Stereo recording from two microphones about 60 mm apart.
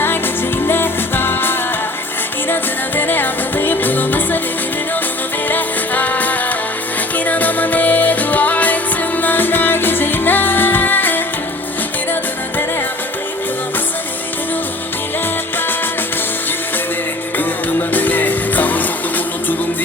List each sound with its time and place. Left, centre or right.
0.7 s music: left
5.5 s music: left
17.3 s music: left